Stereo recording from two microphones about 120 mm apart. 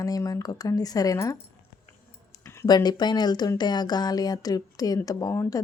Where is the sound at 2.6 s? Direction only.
35° left (ahead or behind).